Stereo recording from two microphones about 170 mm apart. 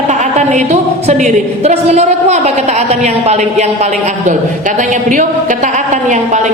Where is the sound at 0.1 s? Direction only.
45° right (ahead or behind).